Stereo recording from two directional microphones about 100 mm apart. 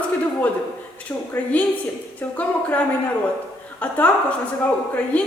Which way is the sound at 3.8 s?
15° left (ahead or behind).